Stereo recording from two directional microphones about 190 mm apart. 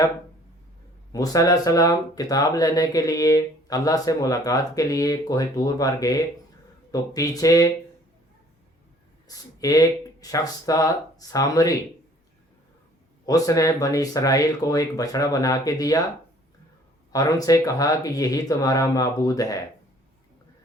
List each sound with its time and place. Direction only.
1.1 s speech: 20° left (ahead or behind)
9.2 s speech: 20° left (ahead or behind)
13.2 s speech: 20° left (ahead or behind)
17.1 s speech: 20° left (ahead or behind)